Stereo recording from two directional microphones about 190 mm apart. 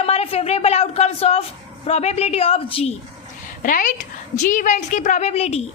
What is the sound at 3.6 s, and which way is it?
A woman's voice, 45° left (ahead or behind).